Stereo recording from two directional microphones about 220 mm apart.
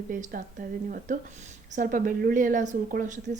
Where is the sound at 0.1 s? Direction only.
35° right (ahead or behind).